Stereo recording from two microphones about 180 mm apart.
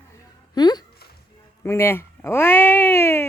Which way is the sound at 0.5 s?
25° left (ahead or behind).